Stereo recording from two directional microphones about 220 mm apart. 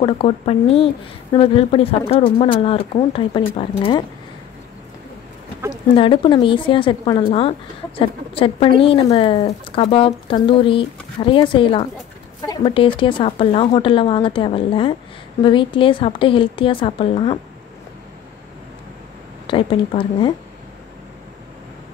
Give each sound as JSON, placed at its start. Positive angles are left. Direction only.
{"t": 0.0, "sound": "a woman's voice", "side_deg": 25}
{"t": 5.9, "sound": "a woman's voice", "side_deg": 20}
{"t": 19.4, "sound": "a woman's voice", "side_deg": 25}